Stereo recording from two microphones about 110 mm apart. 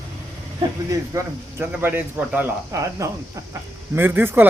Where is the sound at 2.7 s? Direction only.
25° right (ahead or behind).